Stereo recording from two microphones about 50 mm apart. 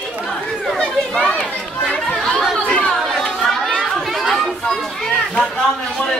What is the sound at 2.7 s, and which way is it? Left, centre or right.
Chatter, left.